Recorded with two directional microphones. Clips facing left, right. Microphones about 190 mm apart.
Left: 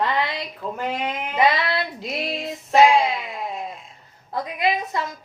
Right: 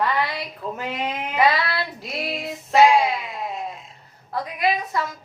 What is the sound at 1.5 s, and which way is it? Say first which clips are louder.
Speech: even; 20° left (ahead or behind).